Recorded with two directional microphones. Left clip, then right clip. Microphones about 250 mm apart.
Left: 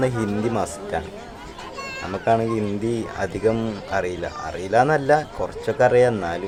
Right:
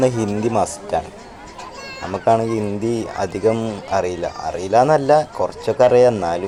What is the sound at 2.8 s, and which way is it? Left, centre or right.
Speech, centre.